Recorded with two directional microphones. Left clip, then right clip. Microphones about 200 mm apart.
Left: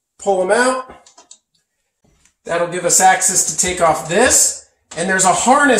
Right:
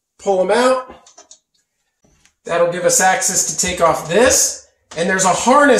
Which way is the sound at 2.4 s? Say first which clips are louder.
Right 3 dB; 15° right (ahead or behind).